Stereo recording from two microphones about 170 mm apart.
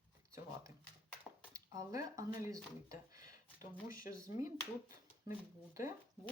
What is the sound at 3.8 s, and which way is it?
Speech, 55° left (ahead or behind).